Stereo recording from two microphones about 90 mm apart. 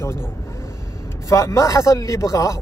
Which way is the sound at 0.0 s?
25° left (ahead or behind).